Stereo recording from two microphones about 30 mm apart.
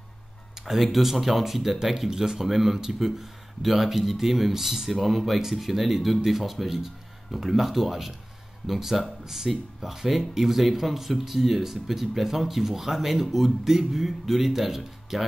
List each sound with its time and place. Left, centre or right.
0.6 s music: centre
0.9 s speech: centre